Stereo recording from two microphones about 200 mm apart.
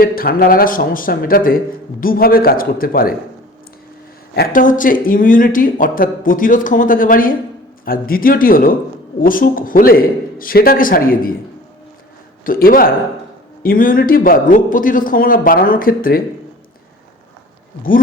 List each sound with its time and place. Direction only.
0.0 s speech: 50° left (ahead or behind)
4.4 s speech: 45° left (ahead or behind)
12.5 s speech: 45° left (ahead or behind)